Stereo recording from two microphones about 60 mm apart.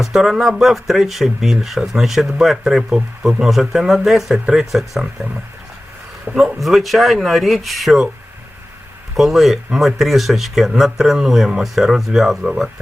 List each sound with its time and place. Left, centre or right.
0.0 s speech: centre
6.3 s speech: right
6.6 s speech: centre
9.1 s speech: centre